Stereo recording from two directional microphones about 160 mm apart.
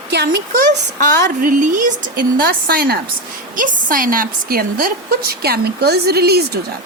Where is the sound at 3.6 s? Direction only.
55° right (ahead or behind); by 6.6 s 80° right.